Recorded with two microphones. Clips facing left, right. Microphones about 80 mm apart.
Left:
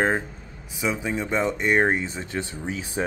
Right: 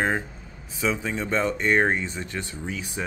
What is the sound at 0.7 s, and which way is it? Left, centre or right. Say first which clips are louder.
Speech: even; centre.